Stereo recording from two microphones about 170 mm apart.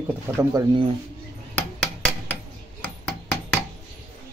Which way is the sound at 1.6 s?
10° left (ahead or behind).